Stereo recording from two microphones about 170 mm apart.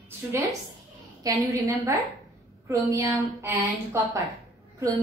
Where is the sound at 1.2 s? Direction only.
20° right (ahead or behind).